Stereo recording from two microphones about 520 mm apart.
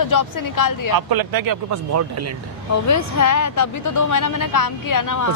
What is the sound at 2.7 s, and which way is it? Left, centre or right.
Speech, left.